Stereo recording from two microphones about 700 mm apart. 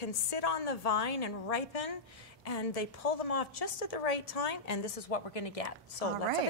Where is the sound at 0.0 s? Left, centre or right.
Left.